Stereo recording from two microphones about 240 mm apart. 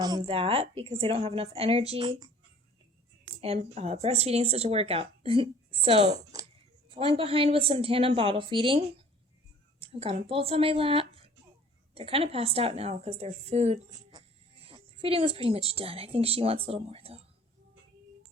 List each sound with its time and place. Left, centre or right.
0.0 s speech: centre
3.4 s speech: right
9.8 s speech: right